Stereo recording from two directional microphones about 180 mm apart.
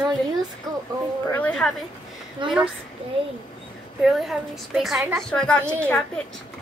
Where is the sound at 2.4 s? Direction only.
25° right (ahead or behind).